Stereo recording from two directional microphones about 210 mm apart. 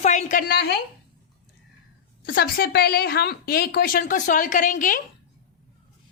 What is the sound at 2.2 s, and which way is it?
A woman's voice, 45° left (ahead or behind).